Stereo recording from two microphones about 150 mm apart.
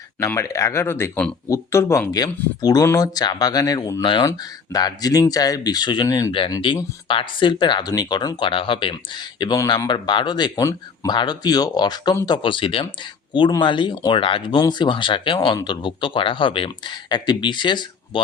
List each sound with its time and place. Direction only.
0.2 s speech: 20° left (ahead or behind)